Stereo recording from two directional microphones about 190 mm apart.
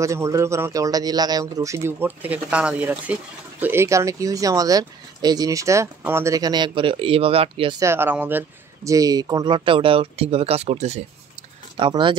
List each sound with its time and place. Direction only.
0.0 s speech: 15° right (ahead or behind)
7.8 s speech: 10° right (ahead or behind); by 11.0 s 35° right (ahead or behind)
11.7 s speech: 25° right (ahead or behind)